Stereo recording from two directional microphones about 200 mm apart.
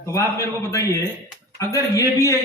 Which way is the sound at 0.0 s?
15° left (ahead or behind).